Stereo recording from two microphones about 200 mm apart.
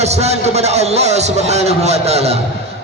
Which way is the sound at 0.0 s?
35° right (ahead or behind).